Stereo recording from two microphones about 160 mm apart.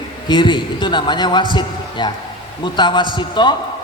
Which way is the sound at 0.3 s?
30° left (ahead or behind).